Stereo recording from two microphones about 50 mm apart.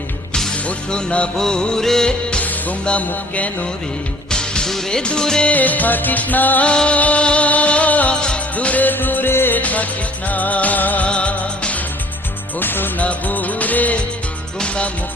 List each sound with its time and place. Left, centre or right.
0.3 s music: centre
2.4 s speech: left
4.3 s music: centre
5.5 s music: left
6.7 s music: left
9.6 s music: left
11.1 s music: left
12.5 s music: left
13.0 s music: left